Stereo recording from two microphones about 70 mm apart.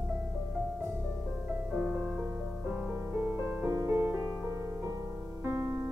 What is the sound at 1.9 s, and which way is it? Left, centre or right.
Music, right.